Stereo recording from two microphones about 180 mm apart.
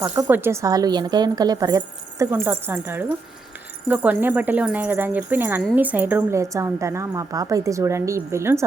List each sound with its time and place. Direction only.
0.2 s speech: 10° right (ahead or behind)